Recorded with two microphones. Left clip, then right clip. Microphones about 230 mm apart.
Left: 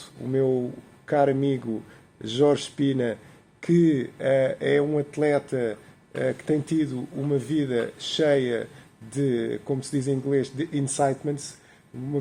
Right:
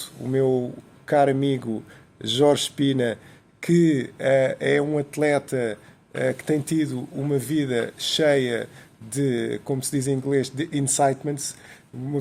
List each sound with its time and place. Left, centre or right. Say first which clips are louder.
0.0 s speech: right 2 dB; right